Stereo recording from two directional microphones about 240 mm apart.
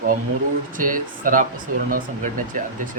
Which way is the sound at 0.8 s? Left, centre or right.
Right.